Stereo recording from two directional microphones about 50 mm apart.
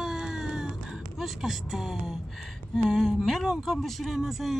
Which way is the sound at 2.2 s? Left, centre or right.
Centre.